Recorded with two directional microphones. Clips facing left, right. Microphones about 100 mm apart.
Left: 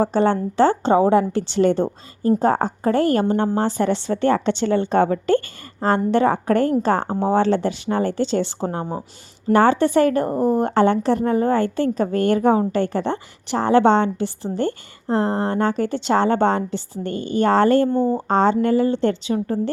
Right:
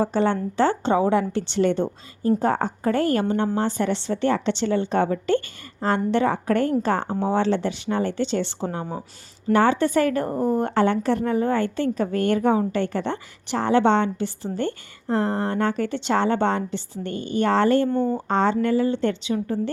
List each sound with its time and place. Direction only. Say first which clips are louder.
0.3 s a woman's voice: left 4 dB; 35° left (ahead or behind); by 5.4 s 50° left (ahead or behind)
5.8 s a woman's voice: left 4 dB; 40° left (ahead or behind)
10.3 s a woman's voice: left 3 dB; 15° left (ahead or behind)
10.7 s a woman's voice: left 3 dB; 30° left (ahead or behind)
11.3 s a woman's voice: left 3 dB; 40° left (ahead or behind)
17.8 s a woman's voice: left 3 dB; 15° left (ahead or behind)
18.1 s a woman's voice: left 4 dB; 35° left (ahead or behind)
18.7 s a woman's voice: left 3 dB; 50° left (ahead or behind)